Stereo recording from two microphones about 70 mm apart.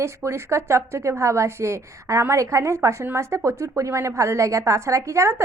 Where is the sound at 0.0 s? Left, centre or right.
Right.